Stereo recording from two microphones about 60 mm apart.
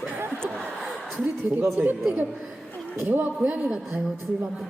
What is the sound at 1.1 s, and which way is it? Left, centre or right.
Speech, right.